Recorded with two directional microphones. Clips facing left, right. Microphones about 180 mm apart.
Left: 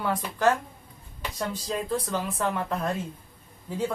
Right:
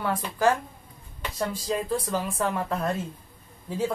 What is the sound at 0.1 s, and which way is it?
Speech, 10° right (ahead or behind).